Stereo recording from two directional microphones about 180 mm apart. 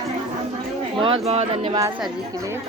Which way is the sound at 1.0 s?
35° right (ahead or behind).